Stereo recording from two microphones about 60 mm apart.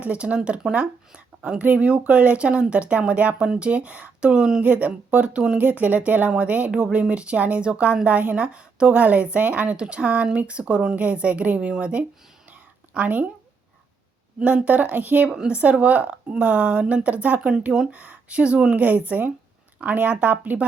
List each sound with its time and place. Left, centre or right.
0.0 s speech: right
4.6 s speech: right
5.5 s speech: right
12.5 s a sound: right
14.3 s speech: right
15.3 s speech: centre
17.4 s speech: centre
17.9 s speech: right